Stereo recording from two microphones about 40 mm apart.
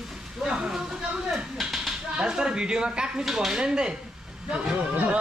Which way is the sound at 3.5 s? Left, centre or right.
Centre.